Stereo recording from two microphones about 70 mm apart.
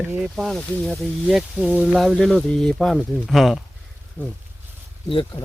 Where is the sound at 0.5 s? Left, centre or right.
Centre.